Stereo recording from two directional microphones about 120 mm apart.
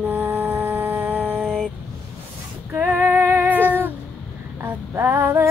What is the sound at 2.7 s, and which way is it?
Female singing, 10° right (ahead or behind).